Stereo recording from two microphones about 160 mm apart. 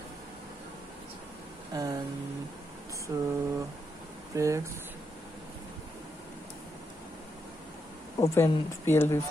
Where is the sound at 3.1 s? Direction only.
20° right (ahead or behind).